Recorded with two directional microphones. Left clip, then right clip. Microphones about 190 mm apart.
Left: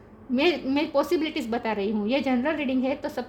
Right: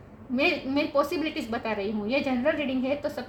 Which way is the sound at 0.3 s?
50° left (ahead or behind).